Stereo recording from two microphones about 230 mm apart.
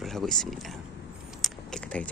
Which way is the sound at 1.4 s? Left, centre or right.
Centre.